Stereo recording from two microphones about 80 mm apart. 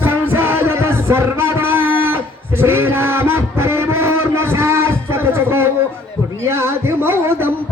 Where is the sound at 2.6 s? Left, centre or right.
Right.